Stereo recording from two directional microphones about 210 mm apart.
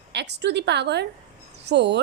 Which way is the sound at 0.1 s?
55° right (ahead or behind).